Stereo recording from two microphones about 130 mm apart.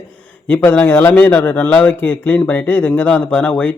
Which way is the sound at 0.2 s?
10° left (ahead or behind).